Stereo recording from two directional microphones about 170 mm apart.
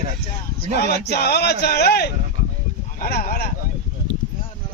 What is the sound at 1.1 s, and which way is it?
Speech, 70° left (ahead or behind).